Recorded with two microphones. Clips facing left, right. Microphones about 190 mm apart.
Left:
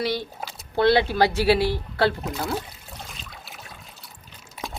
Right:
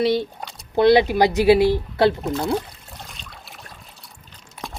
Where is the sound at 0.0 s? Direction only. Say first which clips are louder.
Right 7 dB; 25° right (ahead or behind).